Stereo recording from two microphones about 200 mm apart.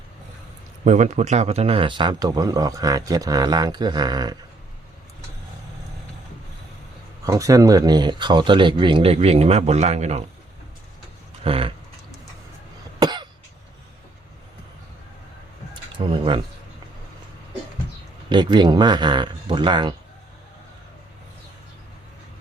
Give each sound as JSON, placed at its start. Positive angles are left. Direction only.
{"t": 0.9, "sound": "speech", "side_deg": -35}
{"t": 7.3, "sound": "speech", "side_deg": -15}
{"t": 11.4, "sound": "speech", "side_deg": -30}
{"t": 13.0, "sound": "cough", "side_deg": -20}
{"t": 15.7, "sound": "a sound", "side_deg": -25}
{"t": 18.3, "sound": "speech", "side_deg": -20}